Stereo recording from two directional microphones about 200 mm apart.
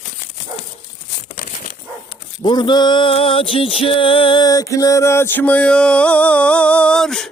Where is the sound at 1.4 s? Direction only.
45° left (ahead or behind).